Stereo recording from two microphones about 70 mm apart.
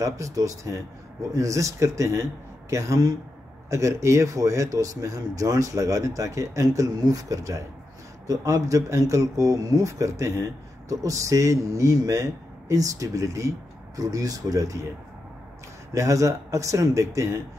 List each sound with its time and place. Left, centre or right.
0.0 s speech: right
3.7 s speech: right
15.9 s speech: right